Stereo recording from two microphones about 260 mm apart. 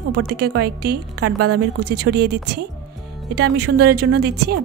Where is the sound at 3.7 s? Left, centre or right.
Right.